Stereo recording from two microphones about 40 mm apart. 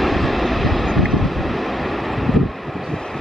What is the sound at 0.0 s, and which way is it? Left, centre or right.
Vehicle, centre.